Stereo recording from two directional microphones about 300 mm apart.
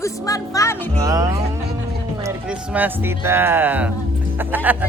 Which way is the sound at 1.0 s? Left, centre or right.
Centre.